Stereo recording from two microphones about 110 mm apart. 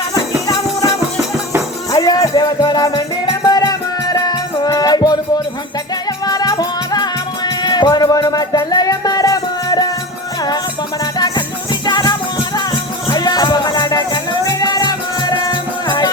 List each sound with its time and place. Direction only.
0.4 s music: 35° left (ahead or behind)
1.9 s music: 35° left (ahead or behind)
11.0 s music: 35° left (ahead or behind)